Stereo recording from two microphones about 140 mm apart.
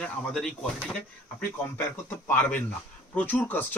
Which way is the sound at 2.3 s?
15° left (ahead or behind).